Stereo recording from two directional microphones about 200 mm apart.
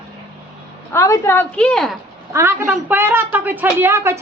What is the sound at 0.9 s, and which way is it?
A woman's voice, 15° left (ahead or behind).